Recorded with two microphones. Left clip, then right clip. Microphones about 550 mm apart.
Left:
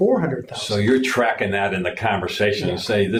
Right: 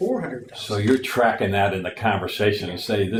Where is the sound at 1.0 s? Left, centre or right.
Right.